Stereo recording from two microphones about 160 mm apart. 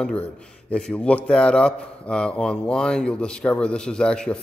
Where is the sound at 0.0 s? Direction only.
5° left (ahead or behind).